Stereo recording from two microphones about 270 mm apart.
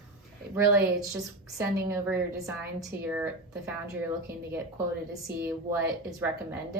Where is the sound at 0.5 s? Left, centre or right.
Centre.